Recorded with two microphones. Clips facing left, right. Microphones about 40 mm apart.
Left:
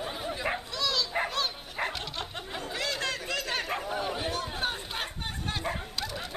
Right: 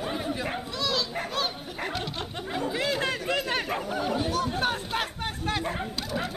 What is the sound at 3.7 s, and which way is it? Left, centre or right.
Speech, centre.